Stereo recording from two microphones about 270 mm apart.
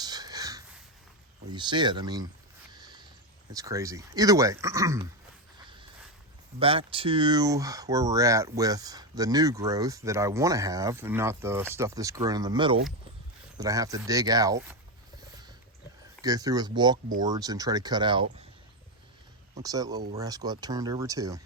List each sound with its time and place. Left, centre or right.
0.0 s whispering: centre
1.5 s speech: centre
2.7 s a sound: centre
3.5 s speech: centre
6.6 s speech: centre
16.2 s speech: centre
19.6 s speech: centre